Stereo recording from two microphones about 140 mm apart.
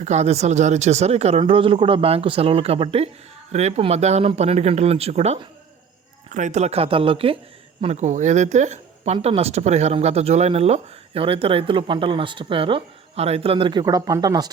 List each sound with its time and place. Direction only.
0.0 s speech: 55° right (ahead or behind)
7.9 s speech: 60° right (ahead or behind); by 14.5 s 30° right (ahead or behind)